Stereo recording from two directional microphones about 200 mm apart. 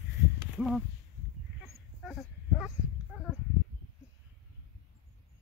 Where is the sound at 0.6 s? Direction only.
Centre (ahead or behind).